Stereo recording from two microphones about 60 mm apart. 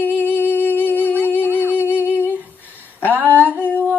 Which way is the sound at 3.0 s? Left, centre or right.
Left.